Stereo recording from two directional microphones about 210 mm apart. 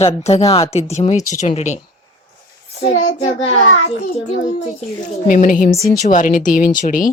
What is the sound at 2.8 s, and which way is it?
Speech, 30° left (ahead or behind).